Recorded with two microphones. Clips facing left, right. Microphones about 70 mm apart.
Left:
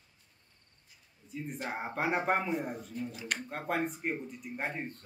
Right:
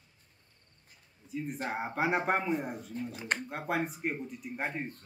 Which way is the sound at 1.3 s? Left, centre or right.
Centre.